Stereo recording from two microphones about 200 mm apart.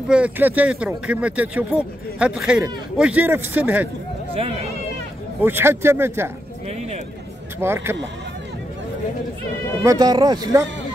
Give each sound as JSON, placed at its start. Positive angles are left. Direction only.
{"t": 0.1, "sound": "speech", "side_deg": -5}
{"t": 4.4, "sound": "speech", "side_deg": -30}
{"t": 5.4, "sound": "speech", "side_deg": -10}
{"t": 7.6, "sound": "speech", "side_deg": -10}
{"t": 9.8, "sound": "a man's voice", "side_deg": -20}